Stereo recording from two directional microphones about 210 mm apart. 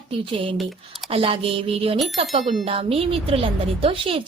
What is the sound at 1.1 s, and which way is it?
Speech, 25° right (ahead or behind).